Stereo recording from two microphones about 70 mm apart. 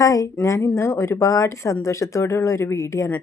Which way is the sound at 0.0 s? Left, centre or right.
Left.